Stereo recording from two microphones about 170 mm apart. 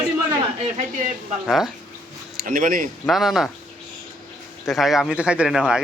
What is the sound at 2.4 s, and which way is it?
Speech, 55° right (ahead or behind).